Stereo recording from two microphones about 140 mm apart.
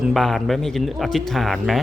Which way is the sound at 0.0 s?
Centre (ahead or behind).